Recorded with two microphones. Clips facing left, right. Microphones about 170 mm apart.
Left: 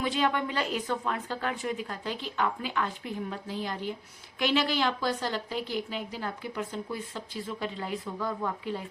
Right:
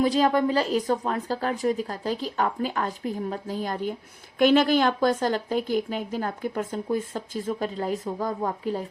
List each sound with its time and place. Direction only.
0.0 s a woman's voice: 40° right (ahead or behind)